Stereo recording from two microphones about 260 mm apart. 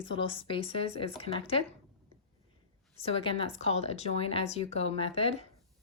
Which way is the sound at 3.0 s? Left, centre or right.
Left.